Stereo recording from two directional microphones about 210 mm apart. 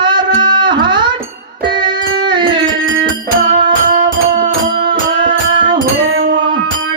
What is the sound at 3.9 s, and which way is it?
Music, 40° right (ahead or behind).